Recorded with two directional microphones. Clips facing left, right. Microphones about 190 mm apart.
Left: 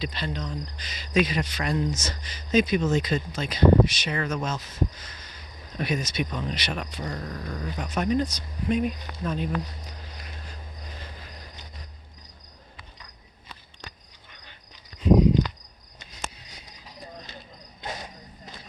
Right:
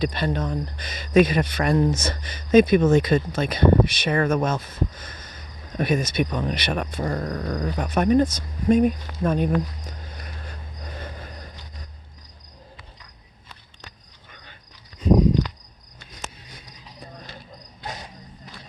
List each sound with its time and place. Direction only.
0.0 s speech: 50° right (ahead or behind)
7.3 s dog: 75° right (ahead or behind)
7.6 s speech: 55° right (ahead or behind)
15.4 s cricket: 15° left (ahead or behind)
16.1 s cricket: 55° right (ahead or behind)